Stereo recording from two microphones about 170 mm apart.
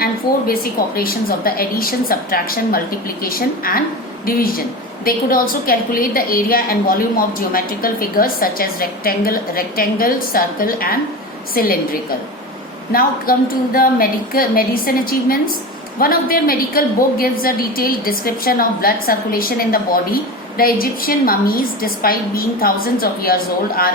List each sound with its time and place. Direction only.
0.0 s a woman's voice: 60° left (ahead or behind)
12.9 s a woman's voice: 55° left (ahead or behind)